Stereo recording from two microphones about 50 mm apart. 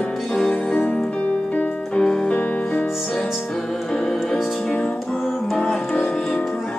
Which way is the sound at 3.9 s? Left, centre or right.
Left.